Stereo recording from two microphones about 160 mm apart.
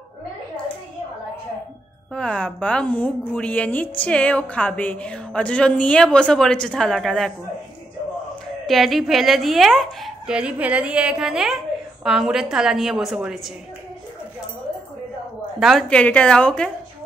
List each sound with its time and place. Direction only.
2.1 s a woman's voice: 5° left (ahead or behind)
8.6 s speech: centre (ahead or behind)
15.6 s speech: 5° left (ahead or behind)